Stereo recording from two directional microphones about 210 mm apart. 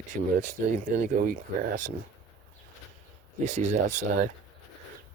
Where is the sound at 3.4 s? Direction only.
35° right (ahead or behind).